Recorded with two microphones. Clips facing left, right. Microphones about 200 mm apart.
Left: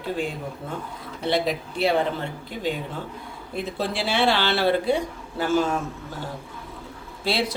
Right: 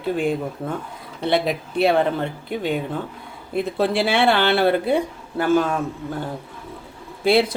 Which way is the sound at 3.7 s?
60° right (ahead or behind).